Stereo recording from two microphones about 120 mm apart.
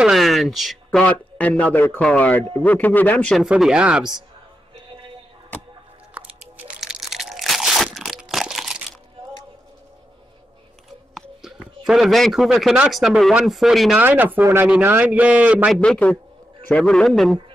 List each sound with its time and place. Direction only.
0.0 s speech: centre (ahead or behind)
1.0 s speech: 10° left (ahead or behind)
3.3 s speech: 5° right (ahead or behind)
6.8 s crunch: 5° right (ahead or behind)
11.1 s a sound: 5° right (ahead or behind)
12.9 s speech: centre (ahead or behind)
14.0 s a man's voice: 15° right (ahead or behind)
15.8 s speech: 10° left (ahead or behind)